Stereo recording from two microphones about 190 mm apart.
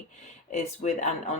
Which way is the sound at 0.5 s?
40° left (ahead or behind).